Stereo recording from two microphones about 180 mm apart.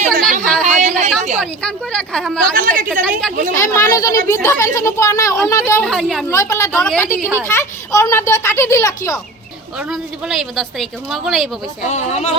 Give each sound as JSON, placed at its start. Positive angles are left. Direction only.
{"t": 0.0, "sound": "a sound", "side_deg": -50}
{"t": 1.4, "sound": "a woman's voice", "side_deg": 5}
{"t": 2.6, "sound": "a woman's voice", "side_deg": -50}
{"t": 3.1, "sound": "a woman's voice", "side_deg": 5}
{"t": 3.5, "sound": "a child's voice", "side_deg": 15}
{"t": 5.8, "sound": "a woman's voice", "side_deg": 0}
{"t": 6.2, "sound": "a child's voice", "side_deg": 15}
{"t": 6.7, "sound": "a woman's voice", "side_deg": 5}
{"t": 7.2, "sound": "a woman's voice", "side_deg": -10}
{"t": 7.4, "sound": "a child's voice", "side_deg": 15}
{"t": 9.9, "sound": "a woman's voice", "side_deg": 0}
{"t": 11.9, "sound": "speech", "side_deg": 40}